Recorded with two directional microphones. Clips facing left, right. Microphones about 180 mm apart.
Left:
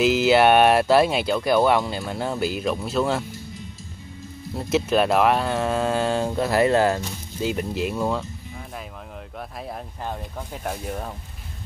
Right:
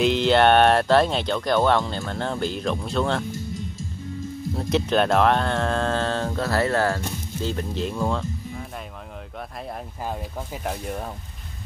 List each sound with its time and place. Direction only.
0.0 s speech: 5° left (ahead or behind)
4.6 s speech: 5° left (ahead or behind)
10.0 s speech: 5° right (ahead or behind)